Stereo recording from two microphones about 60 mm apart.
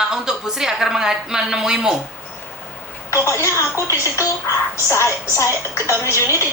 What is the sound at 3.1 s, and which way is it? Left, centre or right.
A woman's voice, left.